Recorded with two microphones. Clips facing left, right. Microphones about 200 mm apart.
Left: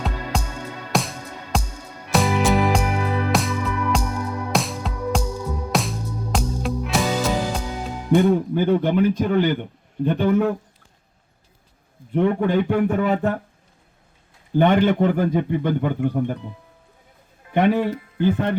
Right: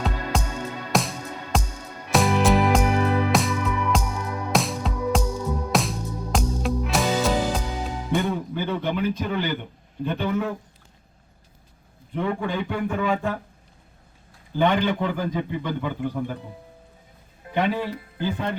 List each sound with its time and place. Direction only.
0.3 s music: centre (ahead or behind)
8.3 s speech: 50° left (ahead or behind)
12.2 s speech: 50° left (ahead or behind)
12.9 s a sound: 55° left (ahead or behind)
15.2 s speech: 55° left (ahead or behind)
17.5 s speech: 55° left (ahead or behind)